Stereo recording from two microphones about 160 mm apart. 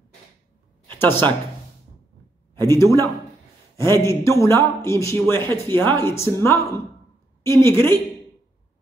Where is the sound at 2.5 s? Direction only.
20° left (ahead or behind).